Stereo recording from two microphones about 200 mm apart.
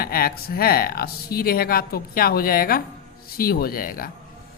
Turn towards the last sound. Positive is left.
turn(degrees=45)  # may be behind; listen again after turning